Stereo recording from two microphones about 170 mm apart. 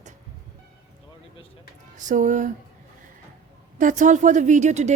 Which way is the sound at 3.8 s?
50° right (ahead or behind).